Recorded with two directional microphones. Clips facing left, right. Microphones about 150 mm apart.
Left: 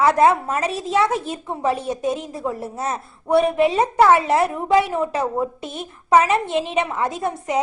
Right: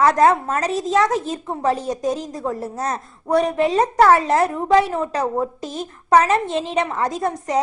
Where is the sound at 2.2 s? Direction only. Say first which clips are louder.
Right 1 dB; 10° left (ahead or behind).